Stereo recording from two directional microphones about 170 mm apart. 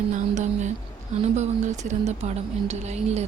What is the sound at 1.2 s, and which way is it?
Speech, 40° right (ahead or behind).